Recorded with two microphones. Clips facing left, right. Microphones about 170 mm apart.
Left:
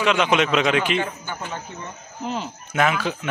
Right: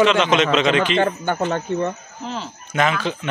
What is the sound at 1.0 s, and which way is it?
Speech, 65° right (ahead or behind).